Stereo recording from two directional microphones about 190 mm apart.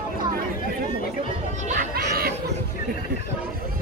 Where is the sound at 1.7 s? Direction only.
45° right (ahead or behind).